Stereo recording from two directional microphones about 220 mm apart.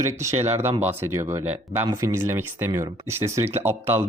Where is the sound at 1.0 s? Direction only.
10° right (ahead or behind).